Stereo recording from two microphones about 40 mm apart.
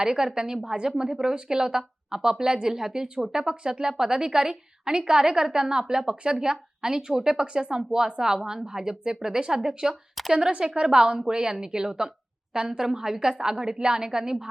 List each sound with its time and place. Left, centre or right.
0.0 s a woman's voice: centre